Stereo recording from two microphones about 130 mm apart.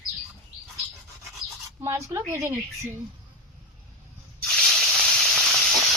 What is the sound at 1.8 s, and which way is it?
Speech, 20° right (ahead or behind).